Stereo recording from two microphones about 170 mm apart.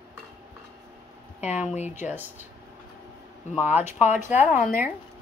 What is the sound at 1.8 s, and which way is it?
Speech, 45° left (ahead or behind).